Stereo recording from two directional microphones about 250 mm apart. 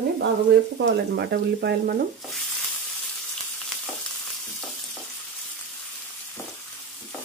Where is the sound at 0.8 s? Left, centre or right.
Right.